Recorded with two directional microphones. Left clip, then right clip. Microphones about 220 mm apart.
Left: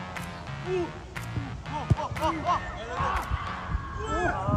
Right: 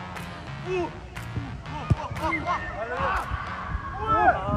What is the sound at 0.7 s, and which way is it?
Music, centre (ahead or behind).